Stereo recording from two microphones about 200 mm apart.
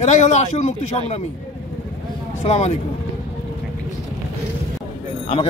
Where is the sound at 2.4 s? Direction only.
30° left (ahead or behind).